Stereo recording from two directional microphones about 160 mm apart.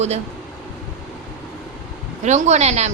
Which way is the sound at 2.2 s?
45° right (ahead or behind).